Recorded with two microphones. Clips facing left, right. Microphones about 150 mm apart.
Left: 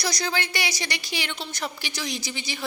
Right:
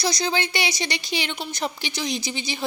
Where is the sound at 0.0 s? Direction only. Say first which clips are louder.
Right 4 dB; 25° right (ahead or behind).